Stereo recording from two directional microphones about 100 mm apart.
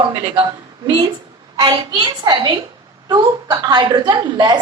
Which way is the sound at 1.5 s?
50° right (ahead or behind).